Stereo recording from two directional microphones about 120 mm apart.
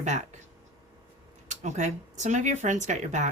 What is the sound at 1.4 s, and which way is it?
Speech, 75° right (ahead or behind).